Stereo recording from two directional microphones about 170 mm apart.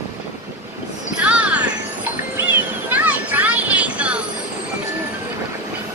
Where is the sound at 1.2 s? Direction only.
5° right (ahead or behind).